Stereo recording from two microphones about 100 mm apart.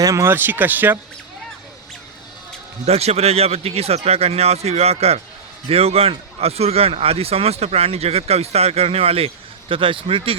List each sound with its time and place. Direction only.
0.0 s speech: 35° right (ahead or behind)
0.3 s speech: 20° right (ahead or behind)
2.8 s a man's voice: 90° right; by 10.3 s 65° right (ahead or behind)